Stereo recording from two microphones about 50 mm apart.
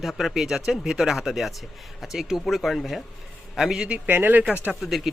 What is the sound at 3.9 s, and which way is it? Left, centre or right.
Speech, right.